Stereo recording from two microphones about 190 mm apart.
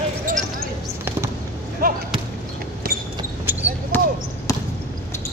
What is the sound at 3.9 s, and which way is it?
Basketball bounce, 10° left (ahead or behind).